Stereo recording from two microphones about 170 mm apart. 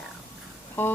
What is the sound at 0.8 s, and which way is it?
Speech, 10° left (ahead or behind).